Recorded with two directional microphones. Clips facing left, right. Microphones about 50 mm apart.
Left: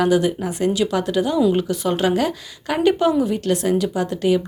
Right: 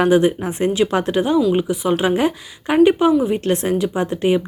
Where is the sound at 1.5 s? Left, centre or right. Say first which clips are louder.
Right 2 dB; centre.